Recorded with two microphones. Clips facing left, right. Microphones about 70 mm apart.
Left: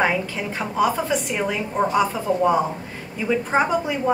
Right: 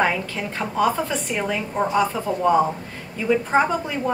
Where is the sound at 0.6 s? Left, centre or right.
Centre.